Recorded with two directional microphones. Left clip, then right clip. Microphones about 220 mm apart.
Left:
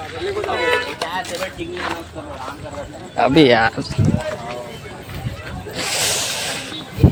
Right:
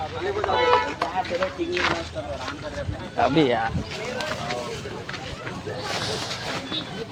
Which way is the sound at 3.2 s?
35° left (ahead or behind).